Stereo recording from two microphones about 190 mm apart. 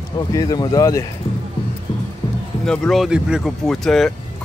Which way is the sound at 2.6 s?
5° left (ahead or behind).